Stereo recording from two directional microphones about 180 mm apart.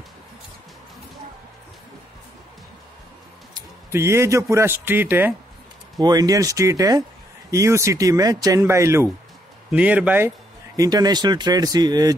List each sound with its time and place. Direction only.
3.5 s a man's voice: 15° right (ahead or behind)
10.8 s speech: 20° right (ahead or behind)